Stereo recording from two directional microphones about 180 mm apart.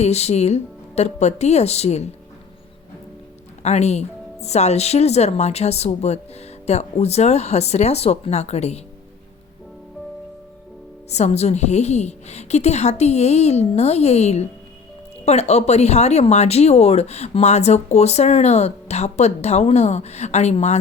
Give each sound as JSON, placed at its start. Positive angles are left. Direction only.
{"t": 0.0, "sound": "speech", "side_deg": 35}
{"t": 3.6, "sound": "speech", "side_deg": 40}
{"t": 11.1, "sound": "speech", "side_deg": 35}